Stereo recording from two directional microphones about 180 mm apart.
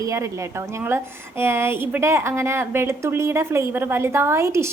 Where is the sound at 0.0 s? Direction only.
15° right (ahead or behind).